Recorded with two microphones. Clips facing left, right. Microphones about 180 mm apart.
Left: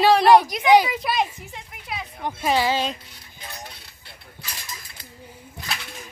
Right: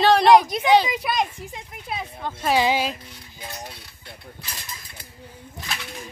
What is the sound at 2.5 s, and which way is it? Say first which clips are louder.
Speech: right 3 dB; 15° right (ahead or behind).